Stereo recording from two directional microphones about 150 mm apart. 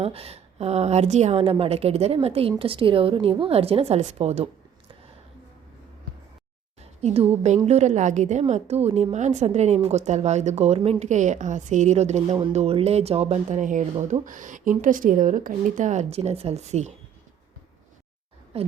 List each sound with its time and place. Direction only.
0.0 s a woman's voice: 40° right (ahead or behind)
7.0 s a woman's voice: 45° right (ahead or behind)
18.5 s a woman's voice: 40° right (ahead or behind)